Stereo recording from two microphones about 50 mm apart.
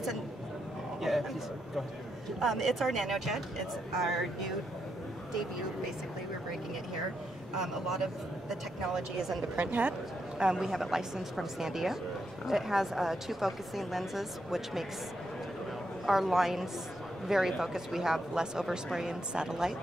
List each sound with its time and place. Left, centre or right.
2.4 s speech: centre
7.5 s speech: centre
9.7 s speech: right
10.4 s speech: centre
16.1 s speech: centre